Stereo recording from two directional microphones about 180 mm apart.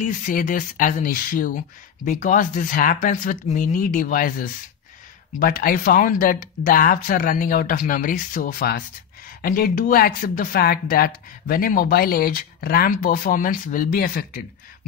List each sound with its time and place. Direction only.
0.0 s speech: 45° left (ahead or behind)